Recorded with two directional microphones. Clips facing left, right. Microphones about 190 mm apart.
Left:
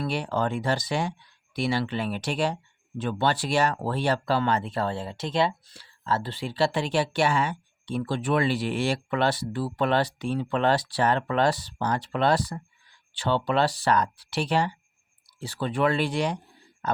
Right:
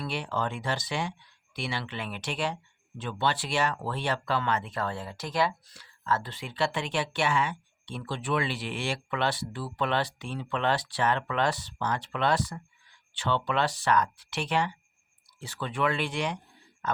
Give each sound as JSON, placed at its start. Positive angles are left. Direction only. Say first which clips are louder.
{"t": 0.0, "sound": "speech", "louder": "left 5 dB", "side_deg": 40}